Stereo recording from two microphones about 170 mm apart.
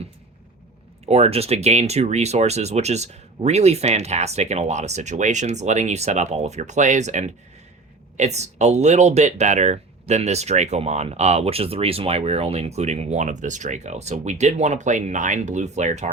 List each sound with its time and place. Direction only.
1.0 s speech: 40° right (ahead or behind)